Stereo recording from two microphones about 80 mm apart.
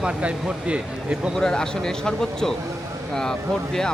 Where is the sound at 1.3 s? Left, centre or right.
Centre.